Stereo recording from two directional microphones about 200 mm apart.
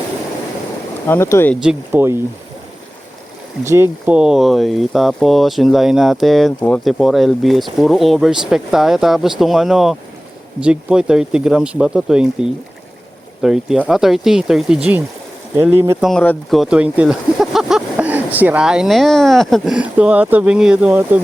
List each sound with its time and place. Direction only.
1.0 s speech: 10° left (ahead or behind)
1.6 s speech: 10° right (ahead or behind)
3.6 s speech: 15° right (ahead or behind)
16.0 s speech: 5° left (ahead or behind)